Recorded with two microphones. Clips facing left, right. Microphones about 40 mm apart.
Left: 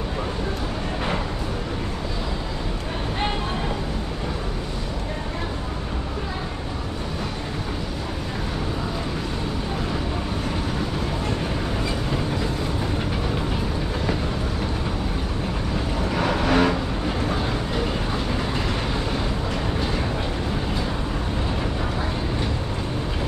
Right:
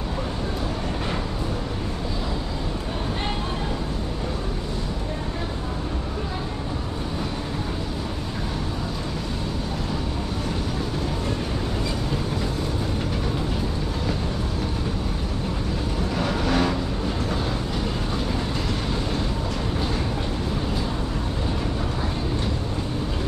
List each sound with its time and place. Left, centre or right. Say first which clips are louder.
16.2 s vehicle: left 3 dB; left
17.3 s train: left 2 dB; centre